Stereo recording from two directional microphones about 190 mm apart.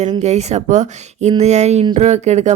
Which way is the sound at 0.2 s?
35° right (ahead or behind).